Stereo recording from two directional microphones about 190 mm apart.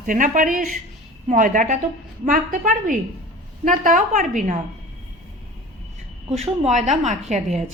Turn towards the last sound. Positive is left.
turn(degrees=-40)  # may be behind; listen again after turning